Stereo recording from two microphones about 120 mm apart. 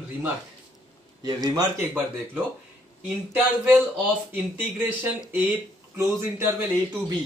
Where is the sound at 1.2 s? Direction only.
30° right (ahead or behind).